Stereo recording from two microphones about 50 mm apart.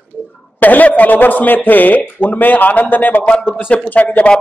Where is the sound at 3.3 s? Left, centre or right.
Centre.